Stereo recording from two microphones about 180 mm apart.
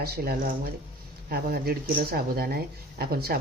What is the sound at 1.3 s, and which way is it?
Speech, 60° right (ahead or behind).